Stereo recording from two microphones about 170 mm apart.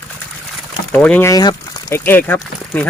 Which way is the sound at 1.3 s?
20° left (ahead or behind).